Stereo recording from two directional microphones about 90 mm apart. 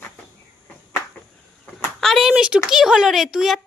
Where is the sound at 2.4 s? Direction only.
10° right (ahead or behind).